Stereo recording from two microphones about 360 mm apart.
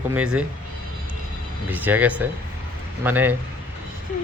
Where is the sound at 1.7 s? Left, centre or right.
Centre.